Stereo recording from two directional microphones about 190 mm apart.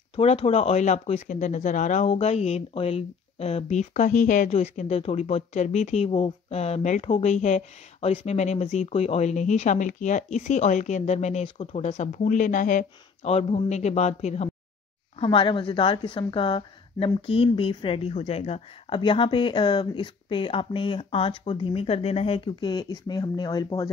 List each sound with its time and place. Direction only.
0.1 s a woman's voice: 30° left (ahead or behind)